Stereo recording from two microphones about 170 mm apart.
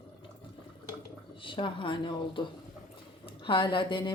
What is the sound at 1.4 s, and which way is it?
A woman's voice, 30° left (ahead or behind).